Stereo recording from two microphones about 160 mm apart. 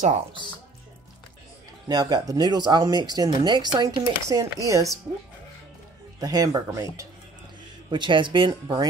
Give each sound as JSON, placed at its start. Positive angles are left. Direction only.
{"t": 1.9, "sound": "speech", "side_deg": -25}
{"t": 6.1, "sound": "speech", "side_deg": -20}